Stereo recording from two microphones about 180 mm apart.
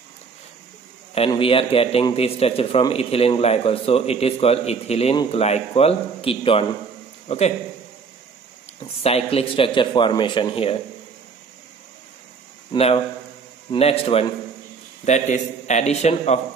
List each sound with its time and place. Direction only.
1.1 s a man's voice: 30° left (ahead or behind)
9.0 s a man's voice: 35° left (ahead or behind)
12.7 s a man's voice: 35° left (ahead or behind)